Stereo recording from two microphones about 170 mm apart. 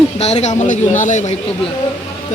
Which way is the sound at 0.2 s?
40° left (ahead or behind).